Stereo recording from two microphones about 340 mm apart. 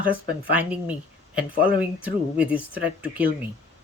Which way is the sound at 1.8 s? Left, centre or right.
Centre.